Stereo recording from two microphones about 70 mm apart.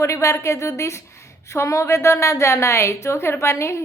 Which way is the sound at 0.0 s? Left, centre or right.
Left.